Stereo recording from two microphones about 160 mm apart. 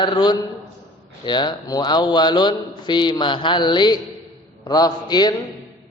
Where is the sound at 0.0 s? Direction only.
25° left (ahead or behind).